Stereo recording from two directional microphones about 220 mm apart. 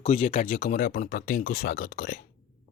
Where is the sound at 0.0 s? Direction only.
25° left (ahead or behind); by 2.2 s 40° left (ahead or behind).